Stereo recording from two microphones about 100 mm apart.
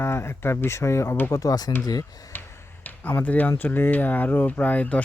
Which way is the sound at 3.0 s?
15° left (ahead or behind).